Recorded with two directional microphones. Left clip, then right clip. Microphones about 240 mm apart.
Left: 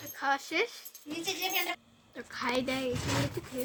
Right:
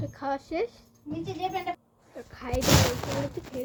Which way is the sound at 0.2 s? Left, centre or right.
Centre.